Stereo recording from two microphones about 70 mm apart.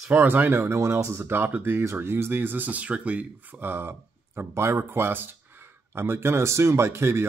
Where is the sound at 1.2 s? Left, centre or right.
Right.